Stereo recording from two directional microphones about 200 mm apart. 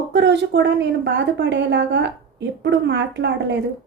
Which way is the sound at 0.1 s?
60° right (ahead or behind).